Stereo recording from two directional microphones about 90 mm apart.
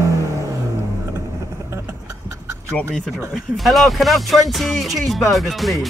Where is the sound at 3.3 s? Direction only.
Centre (ahead or behind).